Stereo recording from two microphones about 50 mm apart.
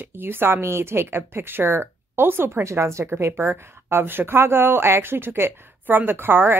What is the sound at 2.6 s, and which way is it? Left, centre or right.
Speech, right.